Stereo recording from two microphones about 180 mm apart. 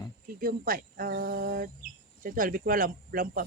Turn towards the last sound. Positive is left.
turn(degrees=-50)  # may be behind; listen again after turning